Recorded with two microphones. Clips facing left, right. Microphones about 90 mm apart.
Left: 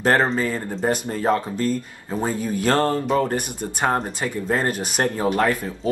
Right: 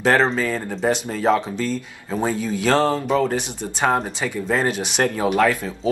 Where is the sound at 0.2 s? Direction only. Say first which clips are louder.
Right 1 dB; 90° right.